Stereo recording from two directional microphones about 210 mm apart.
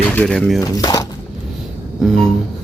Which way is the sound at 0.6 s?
15° left (ahead or behind).